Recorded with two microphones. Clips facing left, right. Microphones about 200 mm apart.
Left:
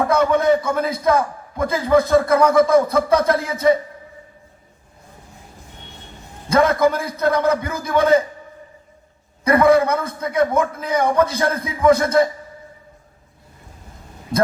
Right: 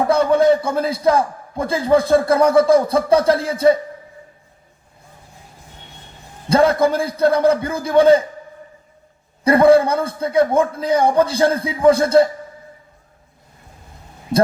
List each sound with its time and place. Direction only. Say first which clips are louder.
0.1 s a man's voice: right 4 dB; 30° right (ahead or behind)
6.5 s a man's voice: right 1 dB; 30° right (ahead or behind)
9.4 s a man's voice: right 3 dB; 30° right (ahead or behind)